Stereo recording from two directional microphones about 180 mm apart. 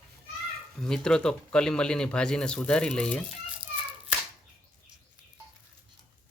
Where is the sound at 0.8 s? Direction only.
5° left (ahead or behind).